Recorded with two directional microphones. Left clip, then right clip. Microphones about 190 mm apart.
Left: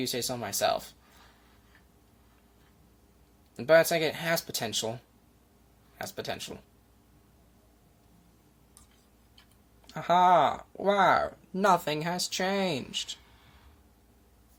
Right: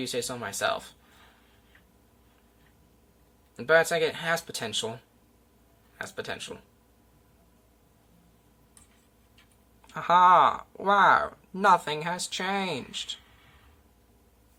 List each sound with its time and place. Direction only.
0.0 s speech: 30° left (ahead or behind)
3.6 s speech: 30° left (ahead or behind)
6.0 s speech: 30° left (ahead or behind)
9.9 s speech: 25° left (ahead or behind)